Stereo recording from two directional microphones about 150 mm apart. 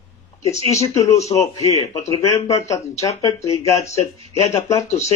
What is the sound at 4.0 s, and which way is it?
Speech, 45° left (ahead or behind).